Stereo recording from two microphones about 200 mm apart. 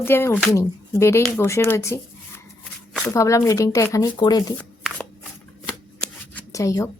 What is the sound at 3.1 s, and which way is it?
Speech, 15° left (ahead or behind).